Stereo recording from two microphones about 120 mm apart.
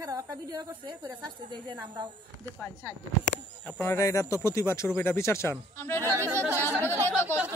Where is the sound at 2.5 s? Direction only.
15° left (ahead or behind).